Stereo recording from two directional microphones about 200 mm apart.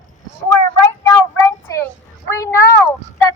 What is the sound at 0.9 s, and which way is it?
Child singing, 15° left (ahead or behind).